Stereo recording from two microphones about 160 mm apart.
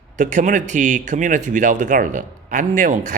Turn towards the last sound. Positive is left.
turn(degrees=-50)  # may be behind; listen again after turning